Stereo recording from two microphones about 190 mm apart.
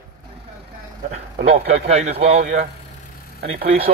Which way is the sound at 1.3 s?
40° right (ahead or behind).